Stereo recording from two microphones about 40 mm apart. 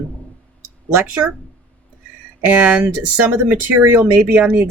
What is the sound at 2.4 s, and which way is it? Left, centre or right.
Speech, right.